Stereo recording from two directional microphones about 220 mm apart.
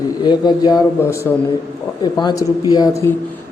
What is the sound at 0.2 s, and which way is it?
A man's voice, 20° left (ahead or behind).